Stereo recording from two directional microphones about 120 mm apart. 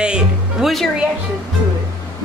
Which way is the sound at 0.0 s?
5° right (ahead or behind).